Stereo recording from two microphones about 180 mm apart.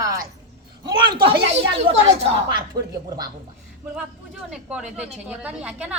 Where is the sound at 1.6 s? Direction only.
90° right.